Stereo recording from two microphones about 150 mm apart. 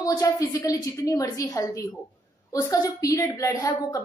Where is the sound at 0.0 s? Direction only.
25° left (ahead or behind).